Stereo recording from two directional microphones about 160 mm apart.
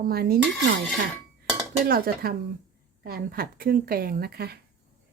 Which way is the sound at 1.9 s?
65° right (ahead or behind).